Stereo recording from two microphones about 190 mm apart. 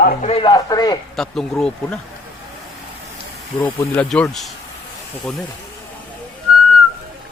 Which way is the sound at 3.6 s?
10° left (ahead or behind).